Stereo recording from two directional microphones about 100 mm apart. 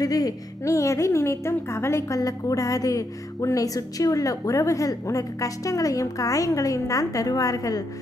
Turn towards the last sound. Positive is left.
turn(degrees=35)  # may be behind; listen again after turning